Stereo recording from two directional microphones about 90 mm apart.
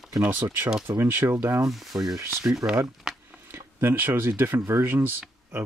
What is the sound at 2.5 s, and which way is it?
Speech, 5° right (ahead or behind).